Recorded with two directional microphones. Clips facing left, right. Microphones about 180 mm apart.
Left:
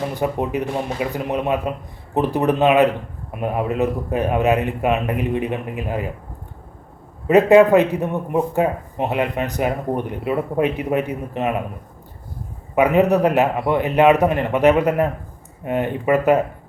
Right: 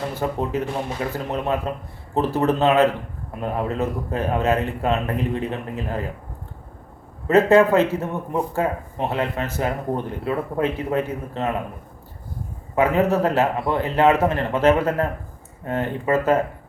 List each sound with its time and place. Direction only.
0.1 s a man's voice: 15° left (ahead or behind)
7.3 s a man's voice: 15° left (ahead or behind)
12.7 s a man's voice: 15° left (ahead or behind)